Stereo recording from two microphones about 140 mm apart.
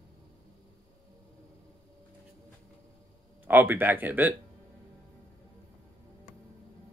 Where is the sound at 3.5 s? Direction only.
15° right (ahead or behind).